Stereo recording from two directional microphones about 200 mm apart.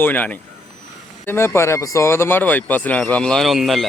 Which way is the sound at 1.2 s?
10° left (ahead or behind).